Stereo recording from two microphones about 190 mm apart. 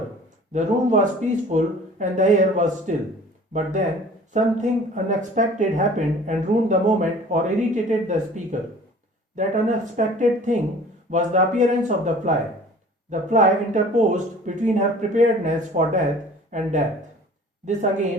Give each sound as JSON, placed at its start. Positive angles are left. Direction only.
{"t": 0.5, "sound": "speech", "side_deg": -40}